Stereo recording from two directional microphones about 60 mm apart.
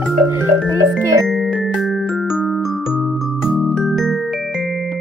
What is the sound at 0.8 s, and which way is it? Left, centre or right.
Music, right.